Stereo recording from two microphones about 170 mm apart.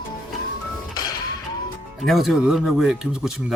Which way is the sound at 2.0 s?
Centre (ahead or behind).